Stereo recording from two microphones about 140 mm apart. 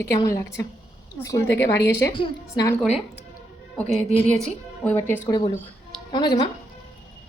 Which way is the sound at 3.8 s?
45° left (ahead or behind).